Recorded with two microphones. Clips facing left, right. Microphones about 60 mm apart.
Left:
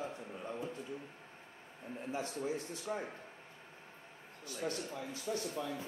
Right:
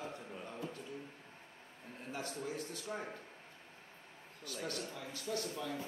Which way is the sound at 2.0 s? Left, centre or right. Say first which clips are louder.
Left 4 dB; left.